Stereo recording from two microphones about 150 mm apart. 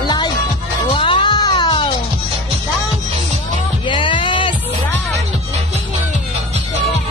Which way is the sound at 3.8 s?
35° left (ahead or behind).